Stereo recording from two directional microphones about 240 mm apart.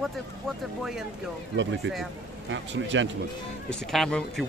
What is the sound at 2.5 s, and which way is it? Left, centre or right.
Speech, right.